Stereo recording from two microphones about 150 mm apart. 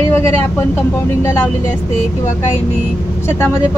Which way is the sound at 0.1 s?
15° left (ahead or behind).